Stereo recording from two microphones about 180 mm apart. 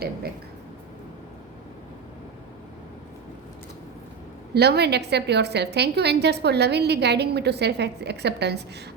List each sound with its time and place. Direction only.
4.5 s a woman's voice: 65° right (ahead or behind)